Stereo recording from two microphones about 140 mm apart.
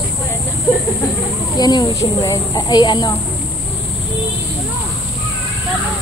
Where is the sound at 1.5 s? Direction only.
30° left (ahead or behind).